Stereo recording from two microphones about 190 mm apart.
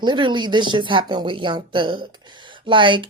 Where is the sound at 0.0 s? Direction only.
25° right (ahead or behind).